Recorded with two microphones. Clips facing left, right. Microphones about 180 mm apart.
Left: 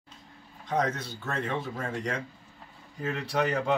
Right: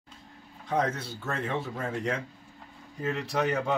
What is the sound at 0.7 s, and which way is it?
Speech, 5° right (ahead or behind).